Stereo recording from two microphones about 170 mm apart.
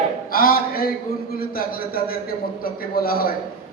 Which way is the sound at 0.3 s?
60° left (ahead or behind).